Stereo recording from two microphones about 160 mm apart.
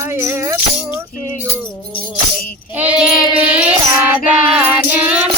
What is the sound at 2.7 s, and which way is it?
Child singing, 10° right (ahead or behind).